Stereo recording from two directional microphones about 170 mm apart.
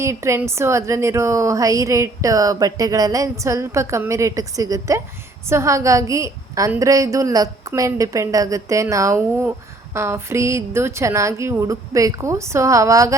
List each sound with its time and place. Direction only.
0.0 s a woman's voice: 15° right (ahead or behind)